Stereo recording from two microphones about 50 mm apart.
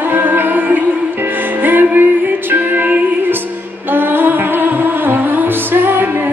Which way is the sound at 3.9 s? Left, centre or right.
Right.